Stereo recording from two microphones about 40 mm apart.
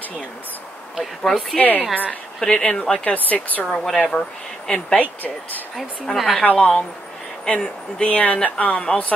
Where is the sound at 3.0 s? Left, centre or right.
Left.